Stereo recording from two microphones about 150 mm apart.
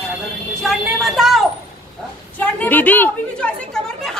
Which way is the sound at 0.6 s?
Centre (ahead or behind).